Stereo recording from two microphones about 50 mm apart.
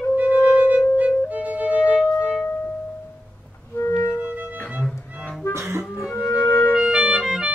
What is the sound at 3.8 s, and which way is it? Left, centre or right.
Clarinet, left.